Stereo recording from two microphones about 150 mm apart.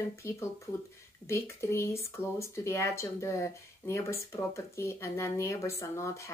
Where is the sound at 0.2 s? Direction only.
20° left (ahead or behind).